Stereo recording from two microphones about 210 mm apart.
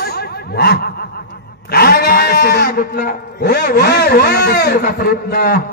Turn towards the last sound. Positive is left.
turn(degrees=45)  # may be behind; listen again after turning